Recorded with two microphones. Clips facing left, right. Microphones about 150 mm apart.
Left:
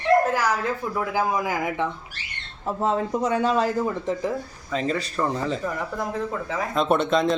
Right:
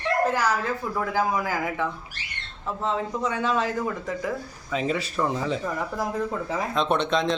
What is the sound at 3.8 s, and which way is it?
Speech, 25° left (ahead or behind).